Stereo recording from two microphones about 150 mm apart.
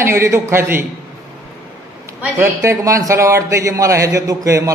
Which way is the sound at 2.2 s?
15° right (ahead or behind).